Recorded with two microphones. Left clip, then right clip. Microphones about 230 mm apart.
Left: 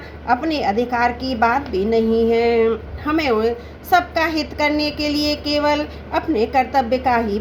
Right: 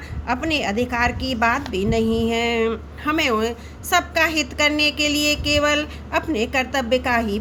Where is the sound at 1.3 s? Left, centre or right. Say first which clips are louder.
Left 3 dB; right.